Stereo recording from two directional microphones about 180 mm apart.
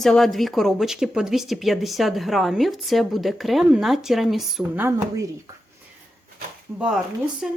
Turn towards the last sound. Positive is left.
turn(degrees=0)  # may be behind; listen again after turning